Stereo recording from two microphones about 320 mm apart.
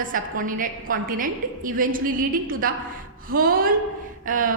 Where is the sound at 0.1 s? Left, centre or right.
Right.